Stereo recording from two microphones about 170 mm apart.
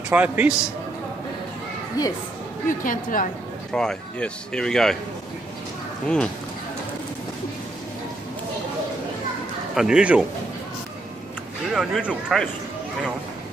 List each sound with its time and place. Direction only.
0.1 s a man's voice: 10° right (ahead or behind)
2.0 s speech: 20° left (ahead or behind)
2.8 s a woman's voice: 50° left (ahead or behind)
3.7 s speech: 5° left (ahead or behind)
6.0 s speech: 5° left (ahead or behind)
9.8 s speech: 5° right (ahead or behind)
11.7 s speech: 5° right (ahead or behind)